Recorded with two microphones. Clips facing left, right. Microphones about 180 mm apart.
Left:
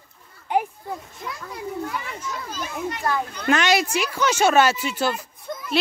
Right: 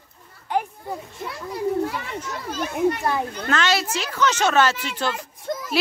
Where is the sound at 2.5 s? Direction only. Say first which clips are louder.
Right 10 dB; 55° right (ahead or behind).